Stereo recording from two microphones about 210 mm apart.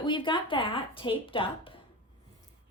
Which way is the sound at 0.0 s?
25° left (ahead or behind).